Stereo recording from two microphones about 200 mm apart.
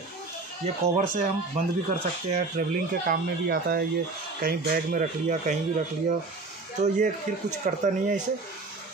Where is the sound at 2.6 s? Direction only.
40° right (ahead or behind).